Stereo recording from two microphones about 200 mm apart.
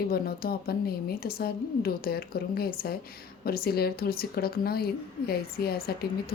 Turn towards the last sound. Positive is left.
turn(degrees=50)  # may be behind; listen again after turning